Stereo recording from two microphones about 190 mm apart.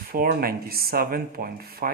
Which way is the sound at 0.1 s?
50° right (ahead or behind).